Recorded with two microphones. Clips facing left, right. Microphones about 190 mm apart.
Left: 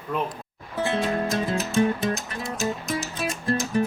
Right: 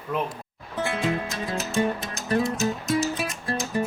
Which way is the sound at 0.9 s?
35° left (ahead or behind).